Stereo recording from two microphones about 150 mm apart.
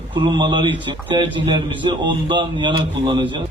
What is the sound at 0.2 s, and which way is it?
A man's voice, 30° right (ahead or behind).